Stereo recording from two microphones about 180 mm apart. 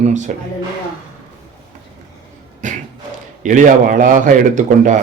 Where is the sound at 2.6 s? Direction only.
45° right (ahead or behind).